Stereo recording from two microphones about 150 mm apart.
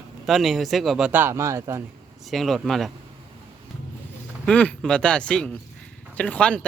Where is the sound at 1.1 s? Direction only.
15° right (ahead or behind).